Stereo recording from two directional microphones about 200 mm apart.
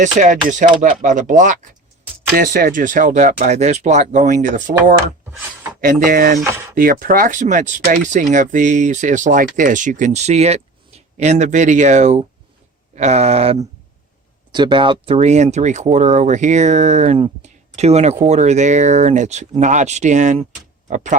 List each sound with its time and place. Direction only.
0.0 s speech: 40° right (ahead or behind)